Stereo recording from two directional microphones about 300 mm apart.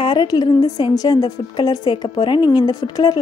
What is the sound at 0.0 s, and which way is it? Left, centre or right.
A woman's voice, centre.